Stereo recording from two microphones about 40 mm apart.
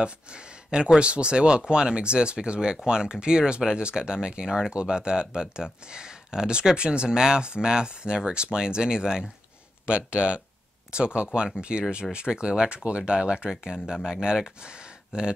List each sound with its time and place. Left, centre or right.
0.0 s speech: right